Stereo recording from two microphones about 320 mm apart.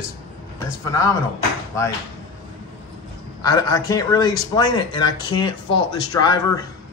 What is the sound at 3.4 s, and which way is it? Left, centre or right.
A man's voice, centre.